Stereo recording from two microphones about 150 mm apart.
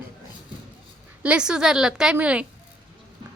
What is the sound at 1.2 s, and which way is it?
A woman's voice, 5° right (ahead or behind).